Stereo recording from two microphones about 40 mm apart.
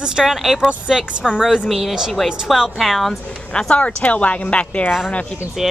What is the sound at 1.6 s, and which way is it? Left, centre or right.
Speech, centre.